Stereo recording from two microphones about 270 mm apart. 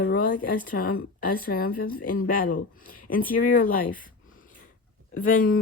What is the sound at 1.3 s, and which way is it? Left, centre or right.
Speech, left.